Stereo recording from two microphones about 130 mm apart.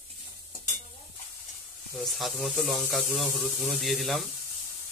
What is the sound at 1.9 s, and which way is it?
Speech, centre (ahead or behind).